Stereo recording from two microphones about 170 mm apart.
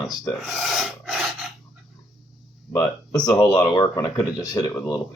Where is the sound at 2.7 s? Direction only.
20° left (ahead or behind).